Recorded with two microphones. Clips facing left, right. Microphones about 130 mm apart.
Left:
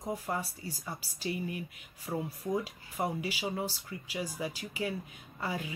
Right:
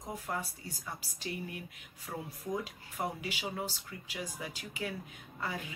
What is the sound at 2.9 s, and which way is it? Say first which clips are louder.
Speech: left 4 dB; 5° left (ahead or behind).